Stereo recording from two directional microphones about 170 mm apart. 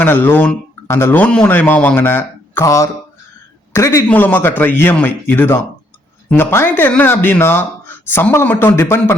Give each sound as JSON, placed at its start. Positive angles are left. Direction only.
{"t": 0.0, "sound": "speech", "side_deg": 10}